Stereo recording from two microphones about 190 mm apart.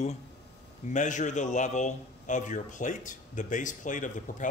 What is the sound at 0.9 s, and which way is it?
A man's voice, 40° left (ahead or behind).